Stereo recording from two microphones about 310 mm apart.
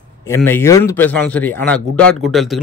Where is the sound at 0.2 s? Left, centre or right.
Centre.